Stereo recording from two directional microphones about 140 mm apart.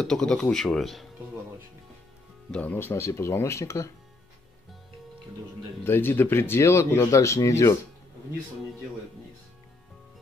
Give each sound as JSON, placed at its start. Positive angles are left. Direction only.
{"t": 0.0, "sound": "speech", "side_deg": 5}
{"t": 2.5, "sound": "speech", "side_deg": 10}
{"t": 5.9, "sound": "speech", "side_deg": 15}